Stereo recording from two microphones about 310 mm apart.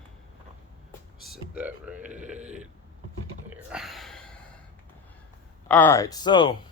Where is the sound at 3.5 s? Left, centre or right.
Centre.